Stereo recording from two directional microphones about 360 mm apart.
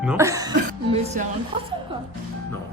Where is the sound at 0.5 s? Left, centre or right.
Centre.